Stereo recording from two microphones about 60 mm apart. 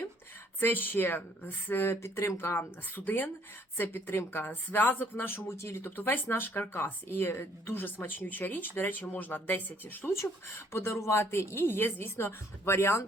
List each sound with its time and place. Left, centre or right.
0.6 s speech: left
5.5 s speech: left
10.7 s speech: left